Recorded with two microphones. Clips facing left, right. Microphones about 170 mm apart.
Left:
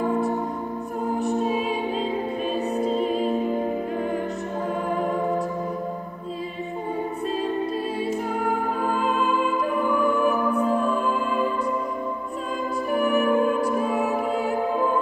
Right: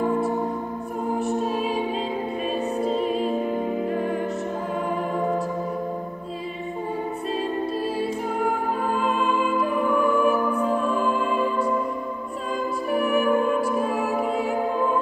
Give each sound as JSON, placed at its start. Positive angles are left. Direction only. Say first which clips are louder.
{"t": 1.2, "sound": "music", "louder": "left 2 dB", "side_deg": 0}
{"t": 9.0, "sound": "music", "louder": "even", "side_deg": 0}
{"t": 12.9, "sound": "music", "louder": "even", "side_deg": 0}